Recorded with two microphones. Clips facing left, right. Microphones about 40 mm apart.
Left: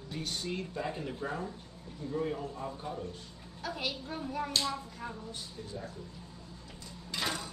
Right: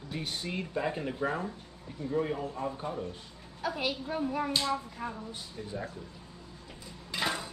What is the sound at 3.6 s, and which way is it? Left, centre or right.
Speech, centre.